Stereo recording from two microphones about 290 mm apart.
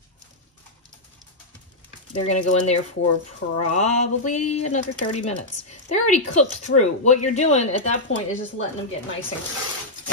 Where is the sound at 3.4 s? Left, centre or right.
Left.